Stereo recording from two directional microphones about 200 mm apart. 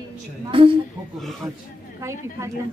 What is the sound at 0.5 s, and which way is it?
Speech, 25° right (ahead or behind).